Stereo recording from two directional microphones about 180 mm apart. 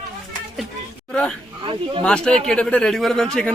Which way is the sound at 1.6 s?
30° right (ahead or behind).